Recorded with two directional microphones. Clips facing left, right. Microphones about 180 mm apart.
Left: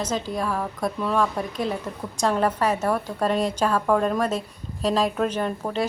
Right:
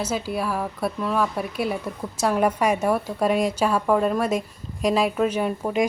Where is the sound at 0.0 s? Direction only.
10° right (ahead or behind).